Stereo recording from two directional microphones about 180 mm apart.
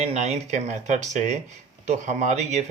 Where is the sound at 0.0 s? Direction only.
40° right (ahead or behind).